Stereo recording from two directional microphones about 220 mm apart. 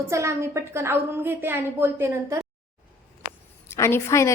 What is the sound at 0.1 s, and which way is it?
A woman's voice, 10° right (ahead or behind).